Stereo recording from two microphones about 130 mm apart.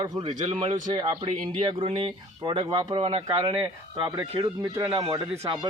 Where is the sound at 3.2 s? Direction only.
25° right (ahead or behind).